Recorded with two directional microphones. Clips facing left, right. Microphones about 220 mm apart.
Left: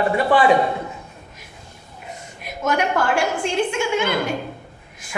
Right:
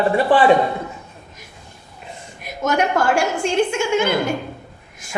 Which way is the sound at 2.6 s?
45° right (ahead or behind).